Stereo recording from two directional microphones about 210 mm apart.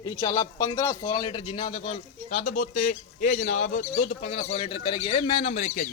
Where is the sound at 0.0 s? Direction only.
20° left (ahead or behind).